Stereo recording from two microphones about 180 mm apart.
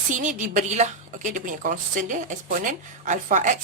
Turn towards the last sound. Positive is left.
turn(degrees=-45)  # may be behind; listen again after turning